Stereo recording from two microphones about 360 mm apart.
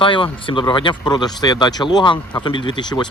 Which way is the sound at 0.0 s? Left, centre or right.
Centre.